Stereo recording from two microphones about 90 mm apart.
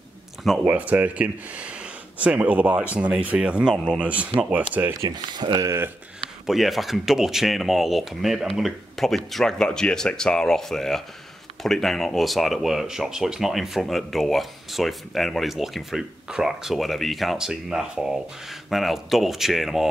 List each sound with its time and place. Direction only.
0.7 s speech: 15° right (ahead or behind)
5.3 s speech: 55° right (ahead or behind)
5.6 s speech: 30° right (ahead or behind)
6.4 s speech: centre (ahead or behind)